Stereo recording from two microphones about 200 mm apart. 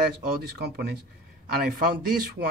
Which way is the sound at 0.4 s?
55° right (ahead or behind).